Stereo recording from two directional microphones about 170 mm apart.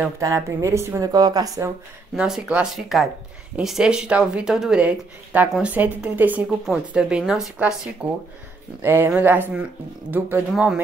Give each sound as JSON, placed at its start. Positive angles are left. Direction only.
{"t": 0.2, "sound": "speech", "side_deg": -20}
{"t": 2.1, "sound": "speech", "side_deg": -5}